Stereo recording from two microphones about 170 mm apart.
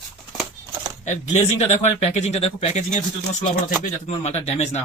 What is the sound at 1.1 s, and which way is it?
Speech, 40° left (ahead or behind).